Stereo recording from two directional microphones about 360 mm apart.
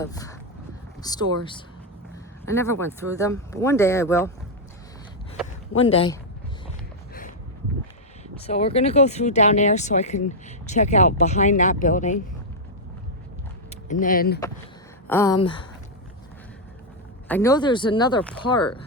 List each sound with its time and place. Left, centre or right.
0.0 s speech: centre
2.5 s speech: centre
5.9 s speech: centre
8.4 s speech: centre
13.7 s speech: left
15.0 s speech: centre
17.2 s speech: centre